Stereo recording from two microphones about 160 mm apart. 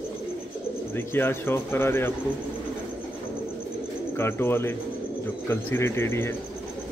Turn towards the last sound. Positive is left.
turn(degrees=15)  # may be behind; listen again after turning